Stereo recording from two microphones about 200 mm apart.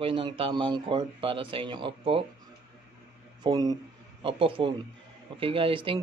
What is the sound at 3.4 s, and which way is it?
Speech, 20° right (ahead or behind).